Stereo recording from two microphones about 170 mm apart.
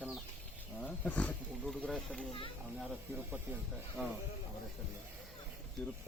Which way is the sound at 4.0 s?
10° right (ahead or behind).